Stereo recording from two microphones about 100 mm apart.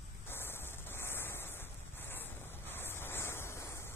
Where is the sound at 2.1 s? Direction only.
20° left (ahead or behind).